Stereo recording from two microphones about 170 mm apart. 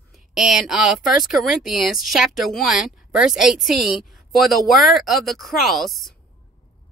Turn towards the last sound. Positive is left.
turn(degrees=0)  # may be behind; listen again after turning